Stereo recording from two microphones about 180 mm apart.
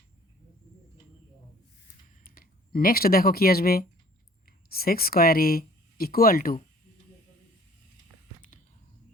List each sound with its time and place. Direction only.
2.2 s speech: 55° left (ahead or behind)